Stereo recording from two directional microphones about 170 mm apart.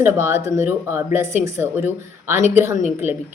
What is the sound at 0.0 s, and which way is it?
Speech, 15° right (ahead or behind).